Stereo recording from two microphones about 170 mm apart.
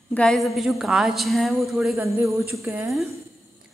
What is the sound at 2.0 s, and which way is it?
Speech, 15° right (ahead or behind).